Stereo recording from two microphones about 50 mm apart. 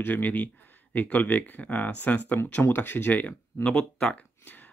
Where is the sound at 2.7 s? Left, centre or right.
Left.